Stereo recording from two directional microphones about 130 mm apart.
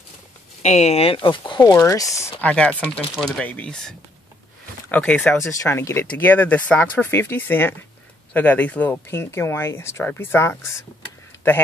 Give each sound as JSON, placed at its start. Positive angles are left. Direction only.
{"t": 0.6, "sound": "speech", "side_deg": 60}
{"t": 1.8, "sound": "speech", "side_deg": 25}
{"t": 2.4, "sound": "speech", "side_deg": 10}
{"t": 4.9, "sound": "speech", "side_deg": 10}
{"t": 5.4, "sound": "speech", "side_deg": 20}